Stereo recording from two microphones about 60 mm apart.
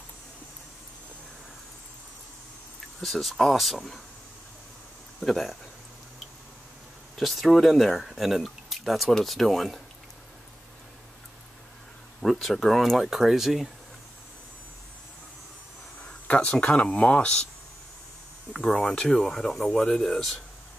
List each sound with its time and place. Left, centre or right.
3.0 s speech: centre
5.2 s speech: centre
7.2 s speech: centre
12.2 s speech: centre
16.0 s speech: left
18.7 s speech: centre